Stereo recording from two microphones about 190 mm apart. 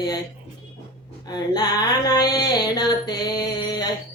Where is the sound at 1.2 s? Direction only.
20° left (ahead or behind).